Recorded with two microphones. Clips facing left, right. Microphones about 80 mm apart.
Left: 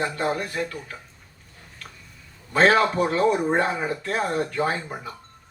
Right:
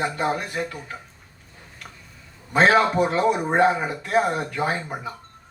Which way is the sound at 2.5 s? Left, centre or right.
Centre.